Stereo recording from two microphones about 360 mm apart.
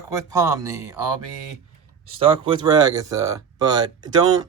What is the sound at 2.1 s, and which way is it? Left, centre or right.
Speech, centre.